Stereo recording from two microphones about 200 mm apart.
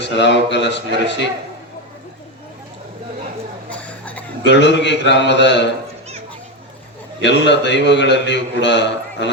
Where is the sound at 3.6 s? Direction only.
5° left (ahead or behind).